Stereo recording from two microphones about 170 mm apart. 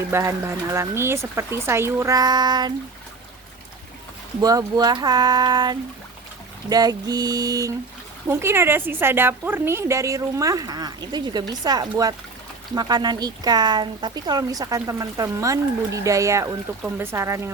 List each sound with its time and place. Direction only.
0.1 s a woman's voice: 15° right (ahead or behind)
4.4 s a woman's voice: 20° right (ahead or behind)